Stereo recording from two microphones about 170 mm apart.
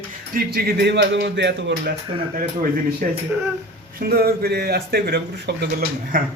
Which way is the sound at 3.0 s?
60° right (ahead or behind).